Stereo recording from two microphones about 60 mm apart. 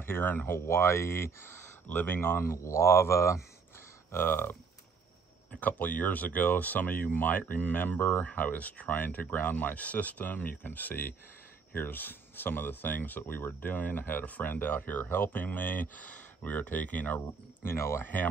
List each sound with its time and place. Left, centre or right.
0.0 s speech: left
0.7 s speech: left
1.9 s speech: left
2.1 s speech: left
2.5 s speech: left
4.1 s speech: left
17.6 s speech: left